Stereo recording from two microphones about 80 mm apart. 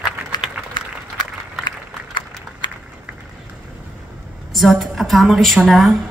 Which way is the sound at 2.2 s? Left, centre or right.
Left.